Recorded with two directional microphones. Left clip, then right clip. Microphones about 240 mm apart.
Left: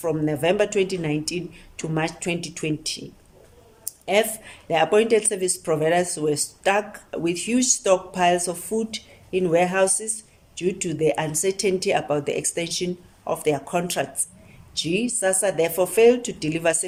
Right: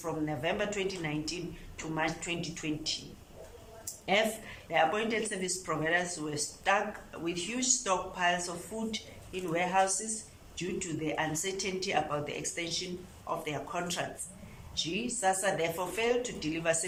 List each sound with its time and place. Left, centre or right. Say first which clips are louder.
0.0 s speech: left 11 dB; left
4.1 s speech: left 8 dB; left